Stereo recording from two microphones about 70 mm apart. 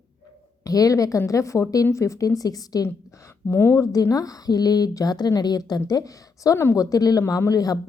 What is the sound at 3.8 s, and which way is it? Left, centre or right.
A woman's voice, left.